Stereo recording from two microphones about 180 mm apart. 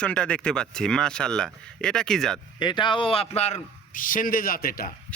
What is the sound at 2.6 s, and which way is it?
A man's voice, 25° left (ahead or behind).